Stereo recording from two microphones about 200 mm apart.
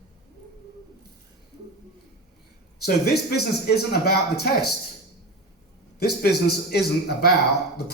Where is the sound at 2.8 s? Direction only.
55° left (ahead or behind).